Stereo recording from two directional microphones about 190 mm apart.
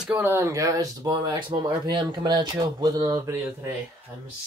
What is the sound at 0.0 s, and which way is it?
Speech, 10° right (ahead or behind).